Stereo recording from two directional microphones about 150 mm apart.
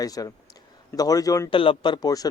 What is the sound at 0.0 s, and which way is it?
Speech, 25° left (ahead or behind).